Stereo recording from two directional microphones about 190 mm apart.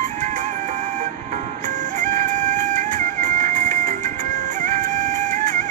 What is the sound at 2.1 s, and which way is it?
Music, 40° right (ahead or behind).